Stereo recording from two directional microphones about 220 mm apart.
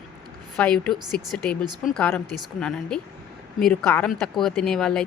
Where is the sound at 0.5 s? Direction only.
5° left (ahead or behind).